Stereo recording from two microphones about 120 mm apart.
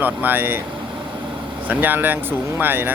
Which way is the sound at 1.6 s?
15° right (ahead or behind).